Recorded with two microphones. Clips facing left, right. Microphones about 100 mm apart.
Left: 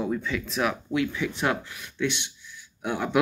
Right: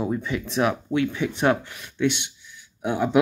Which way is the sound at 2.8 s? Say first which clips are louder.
Right 4 dB; 25° right (ahead or behind).